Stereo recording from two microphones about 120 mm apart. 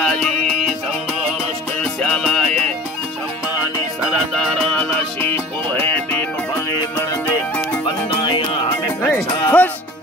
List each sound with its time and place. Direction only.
0.0 s music: 10° left (ahead or behind)
1.8 s music: 10° left (ahead or behind)
4.6 s music: 15° left (ahead or behind)
7.8 s music: 40° left (ahead or behind)
9.0 s music: 15° left (ahead or behind)